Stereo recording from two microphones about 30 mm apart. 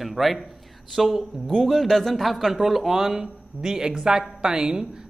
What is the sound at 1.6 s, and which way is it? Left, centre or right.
A man's voice, centre.